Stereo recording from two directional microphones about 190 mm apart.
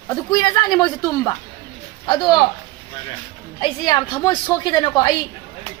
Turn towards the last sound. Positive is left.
turn(degrees=20)  # may be behind; listen again after turning